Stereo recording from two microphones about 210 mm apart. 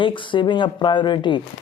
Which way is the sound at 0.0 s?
25° left (ahead or behind).